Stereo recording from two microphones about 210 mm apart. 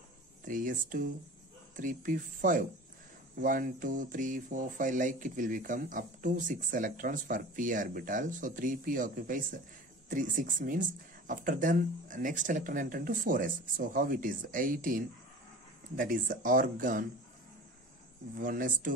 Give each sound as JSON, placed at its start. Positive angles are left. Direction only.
{"t": 0.5, "sound": "speech", "side_deg": -40}
{"t": 18.4, "sound": "speech", "side_deg": -40}